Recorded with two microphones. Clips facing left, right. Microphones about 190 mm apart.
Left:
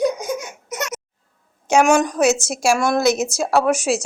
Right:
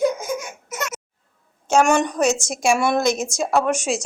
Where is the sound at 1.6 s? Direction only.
5° left (ahead or behind).